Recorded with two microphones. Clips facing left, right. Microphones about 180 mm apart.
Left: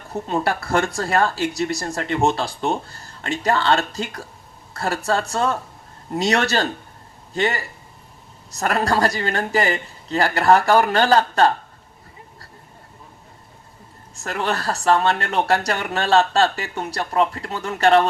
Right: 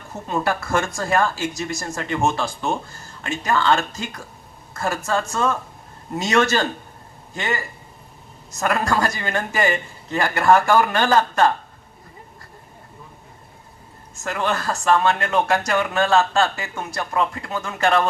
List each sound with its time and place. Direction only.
0.1 s speech: 35° left (ahead or behind)
14.3 s speech: 35° left (ahead or behind)